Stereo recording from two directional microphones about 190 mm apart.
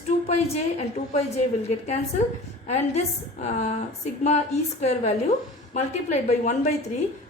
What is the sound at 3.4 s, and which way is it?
A woman's voice, 35° left (ahead or behind).